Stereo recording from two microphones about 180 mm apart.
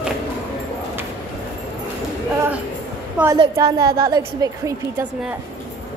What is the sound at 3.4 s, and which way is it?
Speech, 25° right (ahead or behind).